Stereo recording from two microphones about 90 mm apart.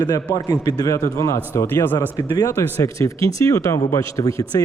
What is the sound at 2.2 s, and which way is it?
Speech, 40° left (ahead or behind).